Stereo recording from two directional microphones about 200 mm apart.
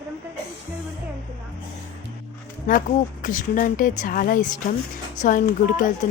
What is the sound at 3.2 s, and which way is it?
Speech, 40° left (ahead or behind).